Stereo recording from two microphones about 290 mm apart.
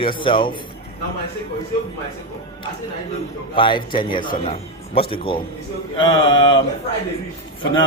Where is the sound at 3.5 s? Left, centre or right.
Centre.